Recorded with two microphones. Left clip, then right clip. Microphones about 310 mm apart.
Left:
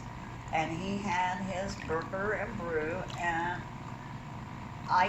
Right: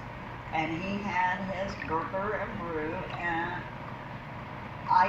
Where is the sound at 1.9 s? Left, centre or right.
Left.